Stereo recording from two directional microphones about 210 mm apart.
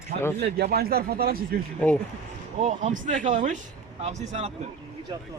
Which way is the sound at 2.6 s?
35° right (ahead or behind).